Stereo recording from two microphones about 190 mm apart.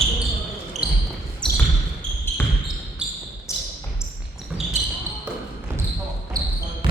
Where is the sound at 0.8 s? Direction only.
5° right (ahead or behind).